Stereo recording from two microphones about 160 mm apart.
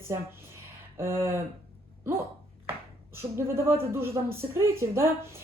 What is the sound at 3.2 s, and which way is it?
Speech, 15° right (ahead or behind).